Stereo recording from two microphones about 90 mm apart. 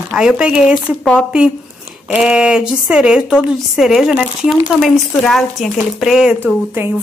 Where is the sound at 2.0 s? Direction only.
10° right (ahead or behind).